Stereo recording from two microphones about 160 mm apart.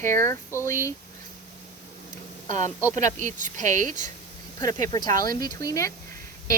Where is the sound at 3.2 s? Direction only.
50° right (ahead or behind).